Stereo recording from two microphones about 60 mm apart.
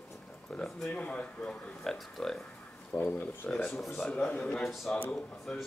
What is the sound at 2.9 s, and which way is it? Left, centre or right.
Speech, left.